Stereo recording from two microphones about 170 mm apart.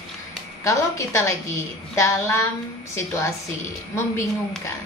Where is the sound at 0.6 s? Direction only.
15° left (ahead or behind).